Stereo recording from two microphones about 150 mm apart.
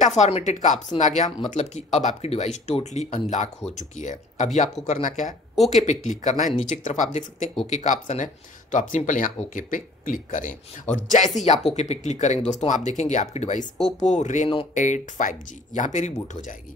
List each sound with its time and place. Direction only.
0.0 s speech: 50° left (ahead or behind)